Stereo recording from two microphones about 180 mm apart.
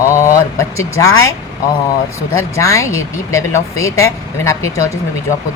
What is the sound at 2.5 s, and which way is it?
Speech, 15° left (ahead or behind).